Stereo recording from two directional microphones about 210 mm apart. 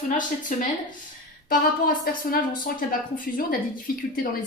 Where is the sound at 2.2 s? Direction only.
40° left (ahead or behind).